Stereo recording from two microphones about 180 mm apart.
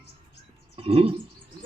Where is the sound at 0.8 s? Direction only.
30° right (ahead or behind).